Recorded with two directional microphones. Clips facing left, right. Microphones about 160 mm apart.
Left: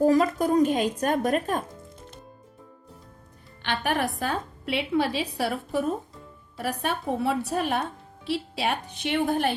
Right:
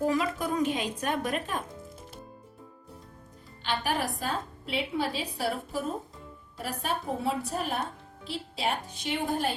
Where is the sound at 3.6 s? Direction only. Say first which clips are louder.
Left 3 dB; 60° left (ahead or behind).